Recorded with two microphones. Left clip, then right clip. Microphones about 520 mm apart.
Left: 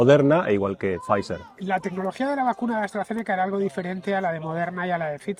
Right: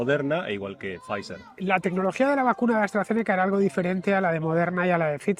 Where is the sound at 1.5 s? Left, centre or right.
Right.